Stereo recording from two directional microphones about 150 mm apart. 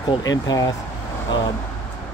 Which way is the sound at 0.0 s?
25° left (ahead or behind).